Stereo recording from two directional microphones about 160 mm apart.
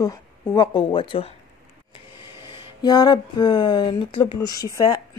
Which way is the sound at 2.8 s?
25° left (ahead or behind).